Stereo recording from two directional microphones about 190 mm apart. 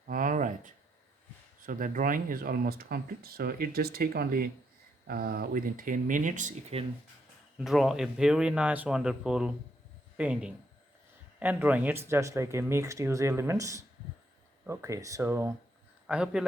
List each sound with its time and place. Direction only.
0.1 s a sound: 45° right (ahead or behind)
1.6 s speech: 45° right (ahead or behind)
7.6 s speech: centre (ahead or behind)